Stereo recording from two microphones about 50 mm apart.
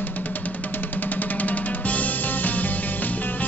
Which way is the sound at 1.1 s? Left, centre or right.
Left.